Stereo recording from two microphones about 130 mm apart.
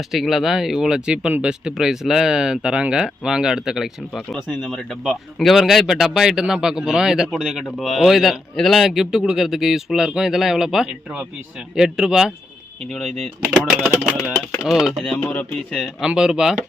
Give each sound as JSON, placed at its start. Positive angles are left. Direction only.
{"t": 0.1, "sound": "speech", "side_deg": 0}
{"t": 14.1, "sound": "speech", "side_deg": -10}
{"t": 15.2, "sound": "speech", "side_deg": 15}
{"t": 15.7, "sound": "speech", "side_deg": 0}